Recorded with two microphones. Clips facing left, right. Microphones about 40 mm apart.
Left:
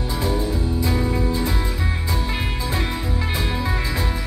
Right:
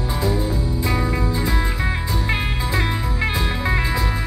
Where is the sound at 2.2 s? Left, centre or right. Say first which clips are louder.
Right 3 dB; right.